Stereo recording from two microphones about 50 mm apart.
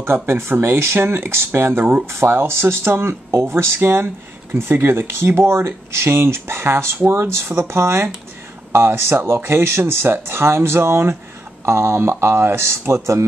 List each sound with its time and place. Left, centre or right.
0.0 s speech: right
0.9 s speech: right